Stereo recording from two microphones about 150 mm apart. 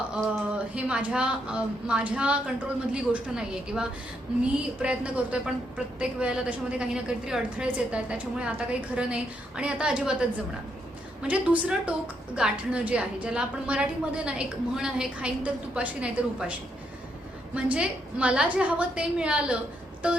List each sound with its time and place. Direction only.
0.1 s a woman's voice: 10° right (ahead or behind)